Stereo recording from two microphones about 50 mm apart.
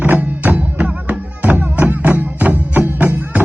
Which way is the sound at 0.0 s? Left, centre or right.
Right.